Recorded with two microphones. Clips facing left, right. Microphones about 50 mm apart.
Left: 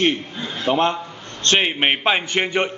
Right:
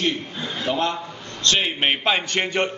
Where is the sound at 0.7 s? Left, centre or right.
Left.